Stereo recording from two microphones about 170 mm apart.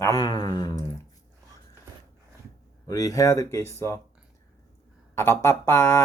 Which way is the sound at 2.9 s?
20° left (ahead or behind).